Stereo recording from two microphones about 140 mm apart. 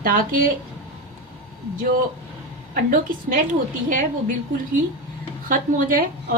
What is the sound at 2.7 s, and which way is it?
Speech, 85° right.